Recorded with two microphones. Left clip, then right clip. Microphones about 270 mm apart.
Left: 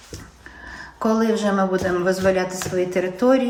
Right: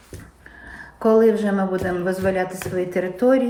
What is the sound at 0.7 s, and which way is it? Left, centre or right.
Speech, centre.